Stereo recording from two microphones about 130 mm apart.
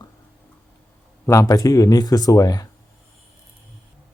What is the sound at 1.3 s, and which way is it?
Speech, 25° left (ahead or behind).